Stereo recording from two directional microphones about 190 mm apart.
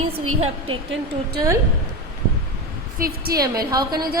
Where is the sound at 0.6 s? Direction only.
75° right (ahead or behind).